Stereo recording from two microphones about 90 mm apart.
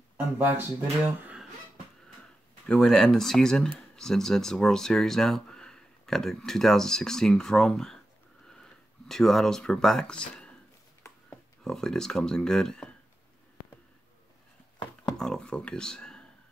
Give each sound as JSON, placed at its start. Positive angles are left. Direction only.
{"t": 0.5, "sound": "speech", "side_deg": -20}
{"t": 2.7, "sound": "speech", "side_deg": 5}
{"t": 9.0, "sound": "speech", "side_deg": 5}
{"t": 11.6, "sound": "speech", "side_deg": 5}
{"t": 15.1, "sound": "speech", "side_deg": 5}